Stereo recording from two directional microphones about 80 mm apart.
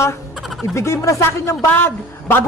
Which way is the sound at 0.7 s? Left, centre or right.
Left.